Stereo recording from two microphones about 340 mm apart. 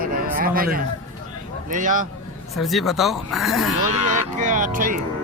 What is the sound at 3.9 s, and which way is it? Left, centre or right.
Speech, right.